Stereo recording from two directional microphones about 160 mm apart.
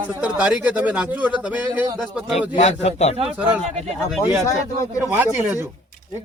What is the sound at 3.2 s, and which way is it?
Speech, 10° right (ahead or behind).